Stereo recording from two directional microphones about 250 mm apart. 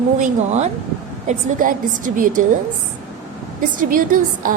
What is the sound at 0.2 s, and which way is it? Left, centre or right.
A woman's voice, right.